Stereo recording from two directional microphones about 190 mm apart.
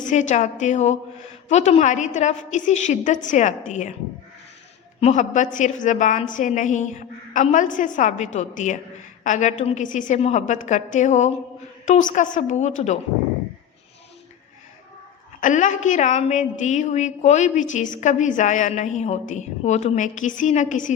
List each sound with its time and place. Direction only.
0.0 s a woman's voice: 40° left (ahead or behind)
4.9 s a woman's voice: 35° left (ahead or behind)
15.4 s a woman's voice: 40° left (ahead or behind)